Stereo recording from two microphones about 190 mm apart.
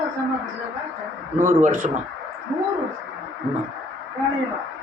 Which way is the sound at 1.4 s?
45° right (ahead or behind).